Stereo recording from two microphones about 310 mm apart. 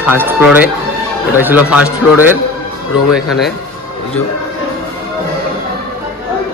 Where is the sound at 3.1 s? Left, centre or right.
Centre.